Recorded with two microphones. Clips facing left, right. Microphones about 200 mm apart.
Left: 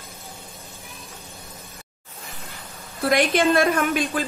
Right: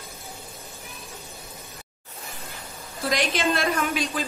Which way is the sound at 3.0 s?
55° left (ahead or behind).